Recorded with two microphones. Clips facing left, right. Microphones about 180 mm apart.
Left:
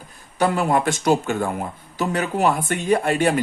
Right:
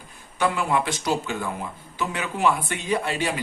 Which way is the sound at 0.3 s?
40° left (ahead or behind).